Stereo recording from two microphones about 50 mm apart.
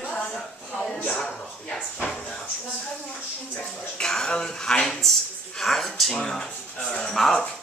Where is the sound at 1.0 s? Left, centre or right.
Centre.